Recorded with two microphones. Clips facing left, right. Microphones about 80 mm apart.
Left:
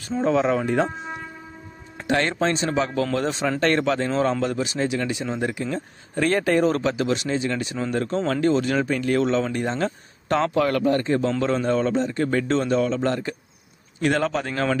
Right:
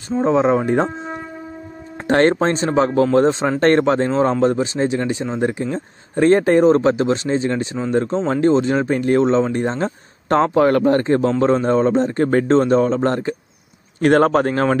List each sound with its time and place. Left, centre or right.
0.1 s speech: right
2.0 s a man's voice: right